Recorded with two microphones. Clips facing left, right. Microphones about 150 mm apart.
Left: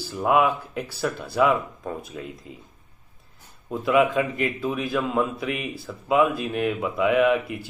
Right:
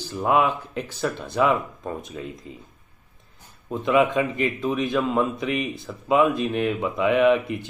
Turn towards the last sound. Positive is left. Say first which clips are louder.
# right 2 dB
turn(degrees=5)  # may be behind; listen again after turning